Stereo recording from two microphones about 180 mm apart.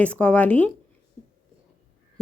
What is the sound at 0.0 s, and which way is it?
Speech, 5° left (ahead or behind).